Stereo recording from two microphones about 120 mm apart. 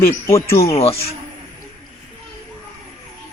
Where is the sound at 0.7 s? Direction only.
55° left (ahead or behind).